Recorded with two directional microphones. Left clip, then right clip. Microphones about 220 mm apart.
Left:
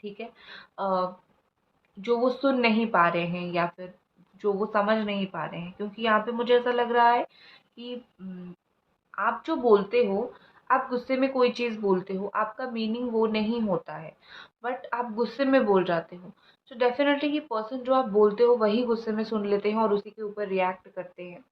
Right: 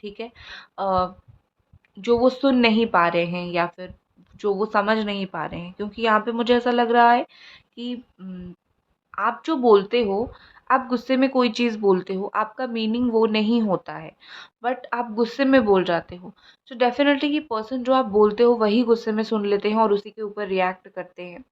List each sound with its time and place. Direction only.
0.0 s speech: 55° right (ahead or behind)
9.1 s speech: 50° right (ahead or behind)